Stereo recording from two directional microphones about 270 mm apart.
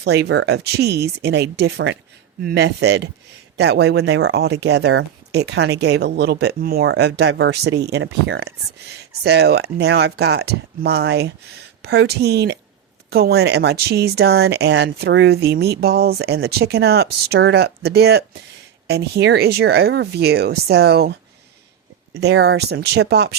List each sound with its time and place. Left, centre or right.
0.0 s speech: right